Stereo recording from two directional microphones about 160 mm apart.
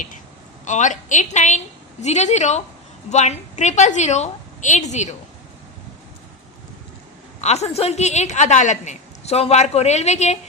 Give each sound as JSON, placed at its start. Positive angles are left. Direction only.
{"t": 0.6, "sound": "a woman's voice", "side_deg": 50}
{"t": 7.4, "sound": "a woman's voice", "side_deg": 45}